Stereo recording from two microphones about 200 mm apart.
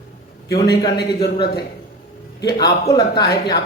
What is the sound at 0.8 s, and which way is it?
Speech, 20° left (ahead or behind).